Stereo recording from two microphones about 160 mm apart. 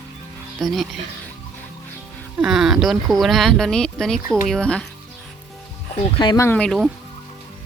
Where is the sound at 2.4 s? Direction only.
5° right (ahead or behind).